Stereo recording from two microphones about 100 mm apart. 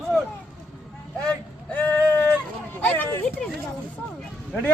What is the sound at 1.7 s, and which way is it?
Vehicle, 20° left (ahead or behind).